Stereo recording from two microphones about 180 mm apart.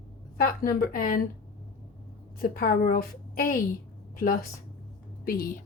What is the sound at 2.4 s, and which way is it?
Speech, 55° left (ahead or behind).